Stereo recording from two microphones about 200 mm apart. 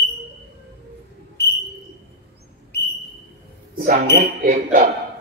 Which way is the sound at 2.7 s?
55° left (ahead or behind).